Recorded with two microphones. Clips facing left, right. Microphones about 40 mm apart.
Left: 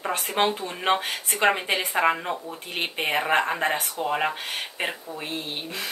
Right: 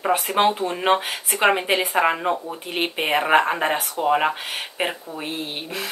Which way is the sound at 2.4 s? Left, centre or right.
Right.